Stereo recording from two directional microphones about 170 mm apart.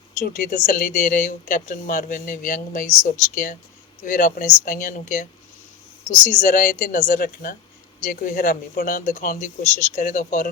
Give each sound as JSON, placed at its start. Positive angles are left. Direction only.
{"t": 0.2, "sound": "speech", "side_deg": 50}